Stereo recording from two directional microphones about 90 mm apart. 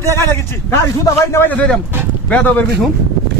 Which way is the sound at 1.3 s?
20° left (ahead or behind).